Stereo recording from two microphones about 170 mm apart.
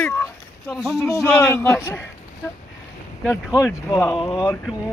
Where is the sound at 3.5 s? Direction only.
15° left (ahead or behind).